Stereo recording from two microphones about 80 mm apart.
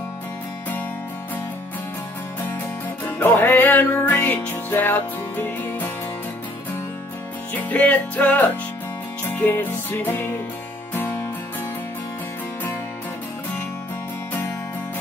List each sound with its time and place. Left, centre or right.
3.1 s music: left
7.7 s music: centre